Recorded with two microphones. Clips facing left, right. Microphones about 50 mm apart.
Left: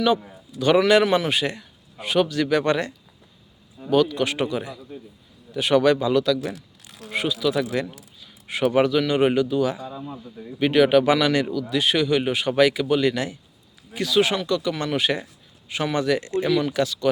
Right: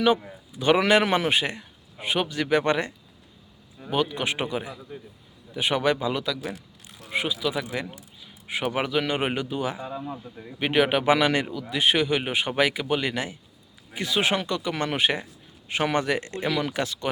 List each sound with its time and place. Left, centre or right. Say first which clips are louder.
0.0 s a man's voice: left 1 dB; right